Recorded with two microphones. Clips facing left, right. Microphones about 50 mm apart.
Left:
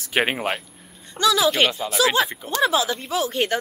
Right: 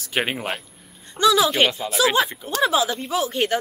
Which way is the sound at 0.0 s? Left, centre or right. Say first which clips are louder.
Left 3 dB; centre.